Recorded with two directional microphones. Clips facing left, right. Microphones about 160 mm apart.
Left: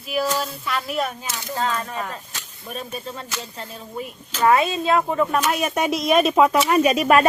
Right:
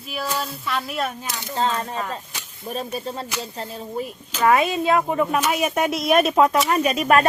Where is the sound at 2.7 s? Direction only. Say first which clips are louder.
Right 4 dB; 35° right (ahead or behind).